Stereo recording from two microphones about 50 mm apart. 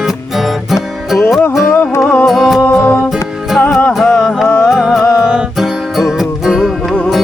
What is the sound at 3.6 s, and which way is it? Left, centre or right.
Music, left.